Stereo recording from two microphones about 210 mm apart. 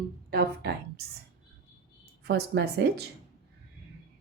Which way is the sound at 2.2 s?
50° right (ahead or behind).